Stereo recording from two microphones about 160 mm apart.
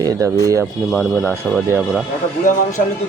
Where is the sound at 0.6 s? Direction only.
Centre (ahead or behind).